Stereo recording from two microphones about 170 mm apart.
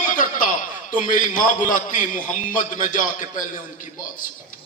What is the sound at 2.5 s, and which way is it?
Speech, 50° left (ahead or behind).